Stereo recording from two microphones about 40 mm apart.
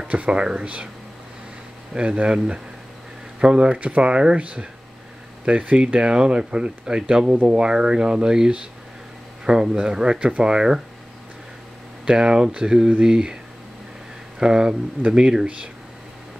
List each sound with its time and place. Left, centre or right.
0.1 s speech: right
2.0 s speech: right
5.9 s speech: right
12.1 s speech: centre
14.4 s speech: centre
15.4 s speech: right